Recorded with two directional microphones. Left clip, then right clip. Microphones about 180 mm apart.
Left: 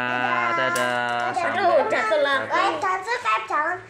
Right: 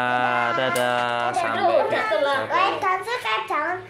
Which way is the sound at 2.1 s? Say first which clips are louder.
Left 2 dB; 65° left (ahead or behind).